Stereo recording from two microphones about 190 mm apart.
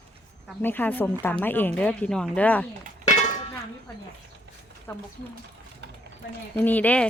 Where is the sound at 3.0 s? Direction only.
40° left (ahead or behind).